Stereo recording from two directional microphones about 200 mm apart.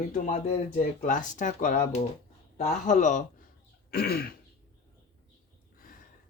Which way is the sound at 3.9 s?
50° left (ahead or behind).